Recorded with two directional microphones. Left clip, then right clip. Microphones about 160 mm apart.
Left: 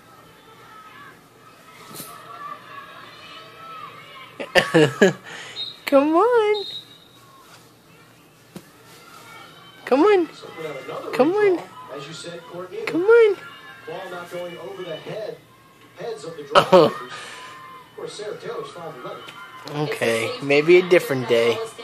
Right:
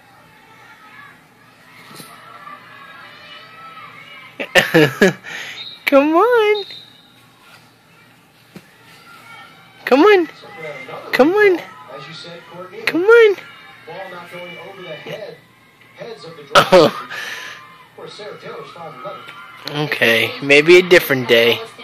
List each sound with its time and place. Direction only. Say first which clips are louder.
4.4 s speech: right 4 dB; 20° right (ahead or behind)
9.8 s a sound: right 6 dB; 20° right (ahead or behind)
11.1 s speech: right 6 dB; 20° right (ahead or behind)
12.8 s speech: right 5 dB; 20° right (ahead or behind)
16.5 s speech: right 4 dB; 15° right (ahead or behind)
19.6 s speech: right 7 dB; 15° right (ahead or behind)